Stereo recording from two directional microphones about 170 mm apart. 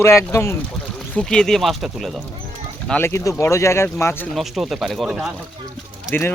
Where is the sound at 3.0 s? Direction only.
15° left (ahead or behind).